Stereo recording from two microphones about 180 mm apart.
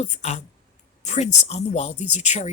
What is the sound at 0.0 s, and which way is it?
Speech, 40° left (ahead or behind).